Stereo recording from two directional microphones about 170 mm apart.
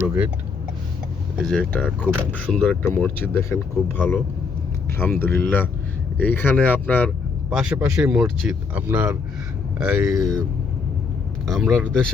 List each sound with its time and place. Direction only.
0.0 s a sound: 10° right (ahead or behind)
1.4 s speech: 5° left (ahead or behind)
5.2 s speech: 10° left (ahead or behind)
7.5 s speech: 5° right (ahead or behind)
11.4 s speech: centre (ahead or behind)